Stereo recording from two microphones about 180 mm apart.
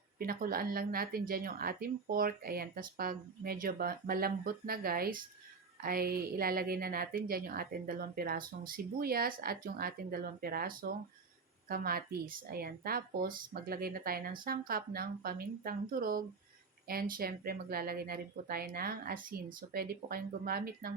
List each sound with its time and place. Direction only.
0.2 s a woman's voice: 55° right (ahead or behind)